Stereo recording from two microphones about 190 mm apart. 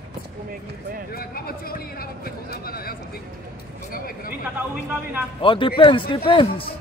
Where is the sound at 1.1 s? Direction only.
50° left (ahead or behind).